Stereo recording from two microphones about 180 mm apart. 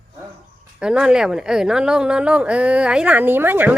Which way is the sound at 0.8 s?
5° right (ahead or behind).